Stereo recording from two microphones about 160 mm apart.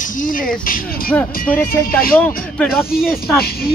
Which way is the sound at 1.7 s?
65° left (ahead or behind).